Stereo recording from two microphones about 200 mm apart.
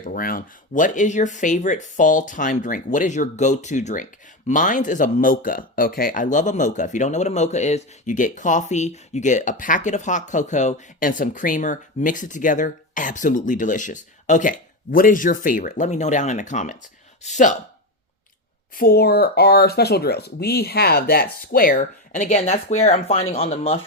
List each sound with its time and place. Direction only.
0.0 s speech: 45° left (ahead or behind)
18.8 s speech: 50° left (ahead or behind); by 23.8 s 30° left (ahead or behind)